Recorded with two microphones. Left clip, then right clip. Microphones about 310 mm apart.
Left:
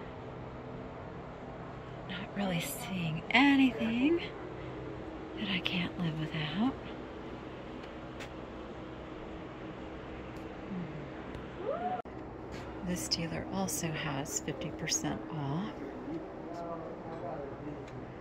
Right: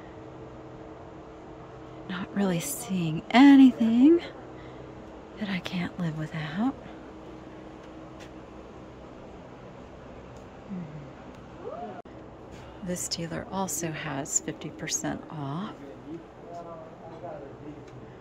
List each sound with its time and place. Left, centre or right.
2.1 s a woman's voice: right
5.4 s a woman's voice: centre
12.8 s a woman's voice: centre
15.3 s speech: right